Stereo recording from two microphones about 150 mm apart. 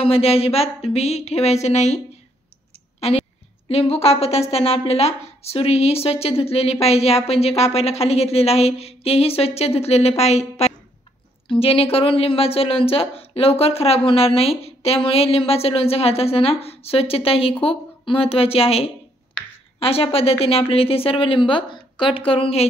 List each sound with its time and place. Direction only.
0.0 s a woman's voice: 40° left (ahead or behind)
3.0 s a woman's voice: 40° left (ahead or behind)